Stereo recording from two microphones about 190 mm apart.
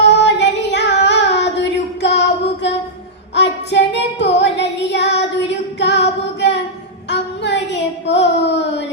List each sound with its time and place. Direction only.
0.0 s female singing: 65° left (ahead or behind)
3.3 s child singing: 65° left (ahead or behind)